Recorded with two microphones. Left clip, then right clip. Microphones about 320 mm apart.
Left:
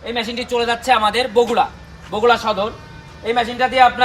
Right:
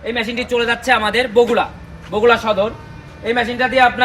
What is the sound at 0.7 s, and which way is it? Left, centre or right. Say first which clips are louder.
Speech: left 1 dB; centre.